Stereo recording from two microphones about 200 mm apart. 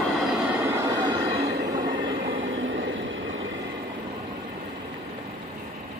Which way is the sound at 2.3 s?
75° right (ahead or behind).